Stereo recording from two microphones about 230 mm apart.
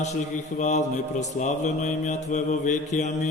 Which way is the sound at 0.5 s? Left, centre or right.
Left.